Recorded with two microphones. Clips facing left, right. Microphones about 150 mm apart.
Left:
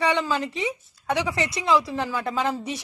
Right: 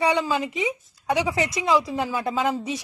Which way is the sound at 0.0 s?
10° right (ahead or behind).